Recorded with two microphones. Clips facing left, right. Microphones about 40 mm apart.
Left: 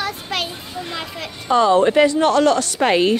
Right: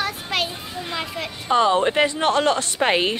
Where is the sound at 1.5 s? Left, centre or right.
Centre.